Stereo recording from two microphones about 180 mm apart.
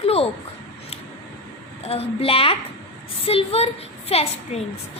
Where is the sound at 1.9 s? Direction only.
30° left (ahead or behind).